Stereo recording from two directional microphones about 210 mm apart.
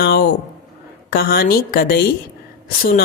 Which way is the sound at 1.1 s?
45° left (ahead or behind).